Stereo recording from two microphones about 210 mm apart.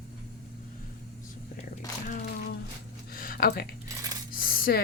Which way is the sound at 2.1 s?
45° left (ahead or behind).